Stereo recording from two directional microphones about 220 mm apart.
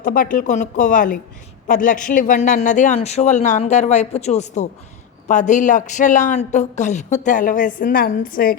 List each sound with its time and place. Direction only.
0.0 s a man's voice: 40° left (ahead or behind)